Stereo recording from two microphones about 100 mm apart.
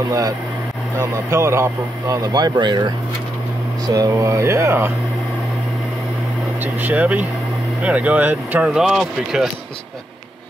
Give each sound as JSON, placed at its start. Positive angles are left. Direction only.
{"t": 0.9, "sound": "speech", "side_deg": -30}
{"t": 3.8, "sound": "speech", "side_deg": -40}
{"t": 6.6, "sound": "speech", "side_deg": -20}
{"t": 8.7, "sound": "speech", "side_deg": -5}